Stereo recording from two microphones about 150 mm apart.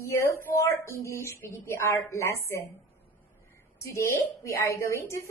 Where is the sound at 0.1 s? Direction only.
15° left (ahead or behind).